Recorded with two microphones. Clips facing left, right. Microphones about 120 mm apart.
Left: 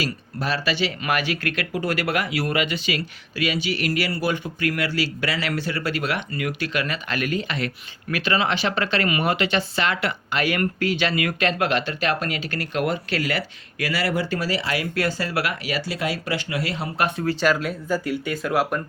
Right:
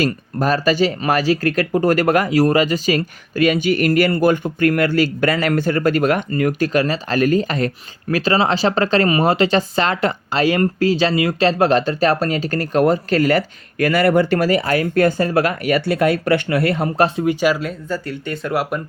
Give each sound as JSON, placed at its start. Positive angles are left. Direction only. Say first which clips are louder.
{"t": 0.0, "sound": "speech", "louder": "right 9 dB", "side_deg": -45}
{"t": 17.4, "sound": "speech", "louder": "right 3 dB", "side_deg": 0}